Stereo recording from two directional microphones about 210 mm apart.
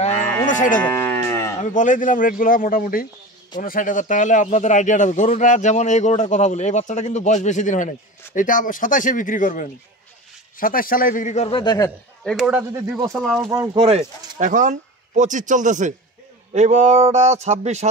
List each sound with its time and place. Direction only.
0.2 s cattle: 10° left (ahead or behind)
0.5 s cattle: 35° left (ahead or behind)
0.7 s cattle: 10° left (ahead or behind)
1.6 s a man's voice: 35° left (ahead or behind); by 11.9 s 20° left (ahead or behind)
12.3 s speech: 5° right (ahead or behind)
13.5 s speech: 20° right (ahead or behind)